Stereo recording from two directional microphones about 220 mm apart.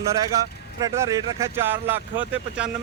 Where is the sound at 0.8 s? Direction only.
15° right (ahead or behind).